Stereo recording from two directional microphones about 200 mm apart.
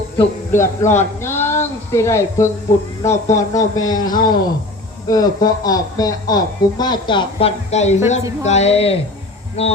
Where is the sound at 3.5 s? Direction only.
20° left (ahead or behind).